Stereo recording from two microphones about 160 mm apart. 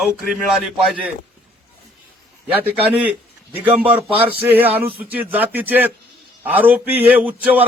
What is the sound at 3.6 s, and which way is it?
A man's voice, 10° right (ahead or behind).